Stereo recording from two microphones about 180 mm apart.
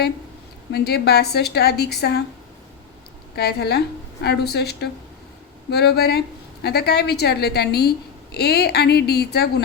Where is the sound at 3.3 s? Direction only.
65° left (ahead or behind).